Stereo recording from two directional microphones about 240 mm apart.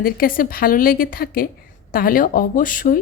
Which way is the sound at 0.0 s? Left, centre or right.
Left.